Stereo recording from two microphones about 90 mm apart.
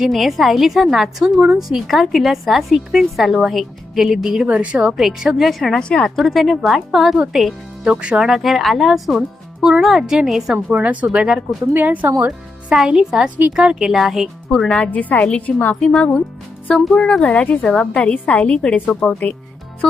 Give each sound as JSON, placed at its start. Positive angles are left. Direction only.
{"t": 0.0, "sound": "a woman's voice", "side_deg": 0}
{"t": 12.2, "sound": "a woman's voice", "side_deg": -10}
{"t": 14.5, "sound": "a woman's voice", "side_deg": 10}
{"t": 15.7, "sound": "a woman's voice", "side_deg": 5}
{"t": 19.8, "sound": "music", "side_deg": 5}